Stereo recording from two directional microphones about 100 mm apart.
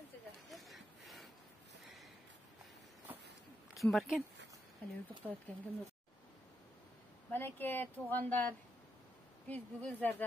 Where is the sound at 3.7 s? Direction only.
Centre (ahead or behind).